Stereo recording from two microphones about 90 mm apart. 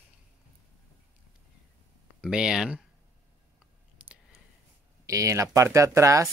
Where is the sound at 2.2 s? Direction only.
5° right (ahead or behind).